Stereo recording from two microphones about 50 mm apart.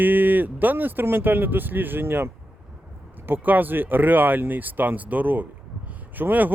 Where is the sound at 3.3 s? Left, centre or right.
Right.